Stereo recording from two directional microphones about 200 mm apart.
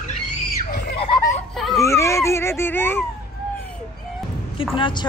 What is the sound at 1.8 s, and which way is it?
Speech, 15° left (ahead or behind).